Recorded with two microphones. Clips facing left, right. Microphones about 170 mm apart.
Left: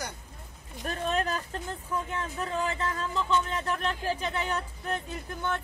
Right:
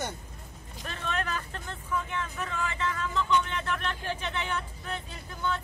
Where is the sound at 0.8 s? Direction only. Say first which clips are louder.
Left 4 dB; 40° left (ahead or behind).